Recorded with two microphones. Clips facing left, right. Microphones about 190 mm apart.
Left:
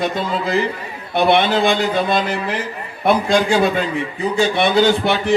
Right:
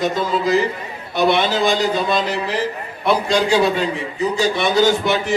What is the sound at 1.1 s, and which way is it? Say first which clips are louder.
A man's voice: left 2 dB; 55° left (ahead or behind).